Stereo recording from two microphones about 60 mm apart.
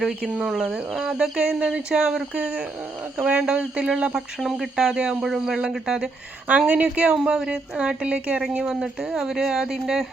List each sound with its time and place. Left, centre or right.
0.2 s speech: centre
4.4 s speech: centre
6.5 s speech: right; by 10.1 s centre